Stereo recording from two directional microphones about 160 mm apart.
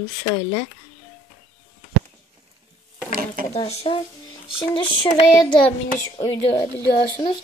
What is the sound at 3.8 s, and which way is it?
Speech, 30° left (ahead or behind).